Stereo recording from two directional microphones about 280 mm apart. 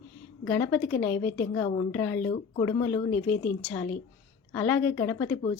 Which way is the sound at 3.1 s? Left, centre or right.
Left.